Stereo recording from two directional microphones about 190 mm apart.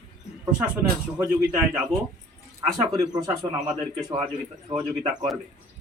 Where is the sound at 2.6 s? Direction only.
20° right (ahead or behind).